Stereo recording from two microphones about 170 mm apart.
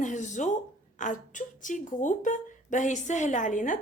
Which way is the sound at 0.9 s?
50° left (ahead or behind).